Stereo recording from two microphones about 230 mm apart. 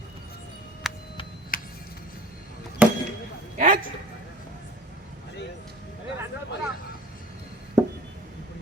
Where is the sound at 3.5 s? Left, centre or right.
Right.